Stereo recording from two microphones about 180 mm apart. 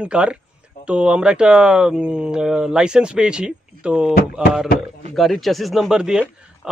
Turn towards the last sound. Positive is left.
turn(degrees=-5)  # may be behind; listen again after turning